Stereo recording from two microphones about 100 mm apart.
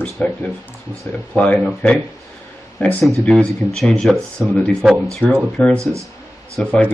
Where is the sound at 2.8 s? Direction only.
15° left (ahead or behind).